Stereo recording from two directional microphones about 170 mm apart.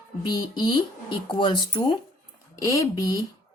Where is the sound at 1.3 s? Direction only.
25° left (ahead or behind).